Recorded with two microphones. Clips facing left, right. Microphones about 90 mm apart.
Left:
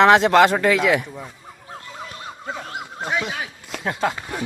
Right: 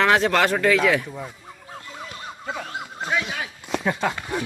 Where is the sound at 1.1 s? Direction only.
5° right (ahead or behind).